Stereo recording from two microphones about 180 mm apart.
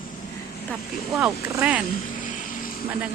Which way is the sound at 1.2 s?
10° right (ahead or behind).